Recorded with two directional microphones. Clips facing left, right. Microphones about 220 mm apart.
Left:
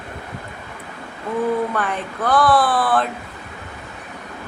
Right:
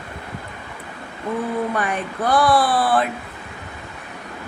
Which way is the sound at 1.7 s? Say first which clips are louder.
Right 1 dB; 15° right (ahead or behind).